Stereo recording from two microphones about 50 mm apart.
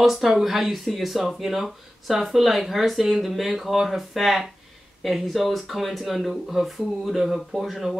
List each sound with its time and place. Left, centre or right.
0.0 s speech: centre